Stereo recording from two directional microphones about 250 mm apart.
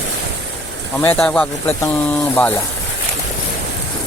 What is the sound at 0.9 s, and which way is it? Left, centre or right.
Speech, centre.